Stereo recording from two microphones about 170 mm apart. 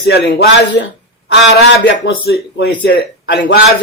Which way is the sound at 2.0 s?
75° left (ahead or behind).